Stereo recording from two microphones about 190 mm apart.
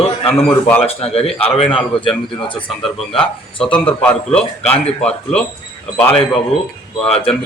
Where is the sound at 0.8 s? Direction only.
30° left (ahead or behind).